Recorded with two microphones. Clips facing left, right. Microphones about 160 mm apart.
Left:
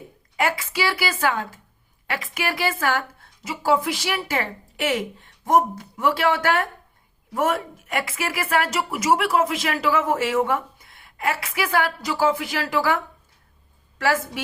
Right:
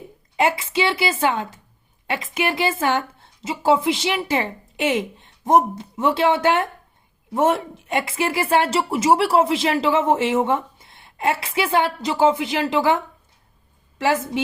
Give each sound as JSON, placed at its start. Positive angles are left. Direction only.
{"t": 0.3, "sound": "a woman's voice", "side_deg": -20}
{"t": 14.0, "sound": "a woman's voice", "side_deg": -20}